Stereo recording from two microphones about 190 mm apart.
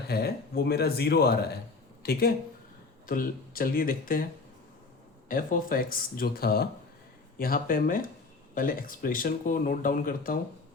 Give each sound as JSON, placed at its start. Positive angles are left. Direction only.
{"t": 0.1, "sound": "speech", "side_deg": 55}
{"t": 5.3, "sound": "speech", "side_deg": 50}